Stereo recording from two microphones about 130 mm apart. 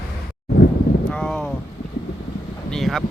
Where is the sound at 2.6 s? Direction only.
5° left (ahead or behind).